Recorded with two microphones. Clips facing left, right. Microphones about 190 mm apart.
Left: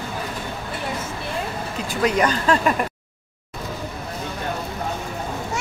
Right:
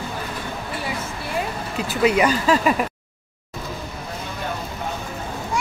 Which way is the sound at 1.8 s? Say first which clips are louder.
Right 2 dB; 10° right (ahead or behind).